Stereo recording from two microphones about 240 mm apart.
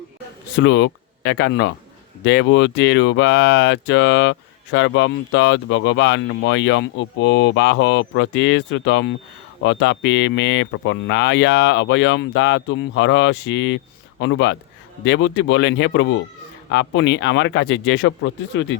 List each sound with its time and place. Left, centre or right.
0.6 s speech: left